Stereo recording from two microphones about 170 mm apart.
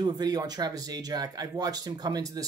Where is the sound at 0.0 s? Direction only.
25° right (ahead or behind).